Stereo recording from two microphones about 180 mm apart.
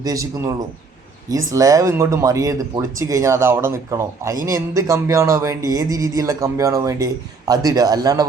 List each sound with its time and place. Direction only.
0.0 s speech: 20° right (ahead or behind)